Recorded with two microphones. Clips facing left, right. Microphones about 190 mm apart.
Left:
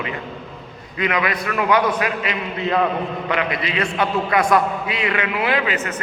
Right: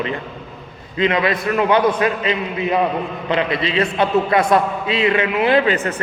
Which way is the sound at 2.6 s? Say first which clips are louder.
Even; 15° right (ahead or behind).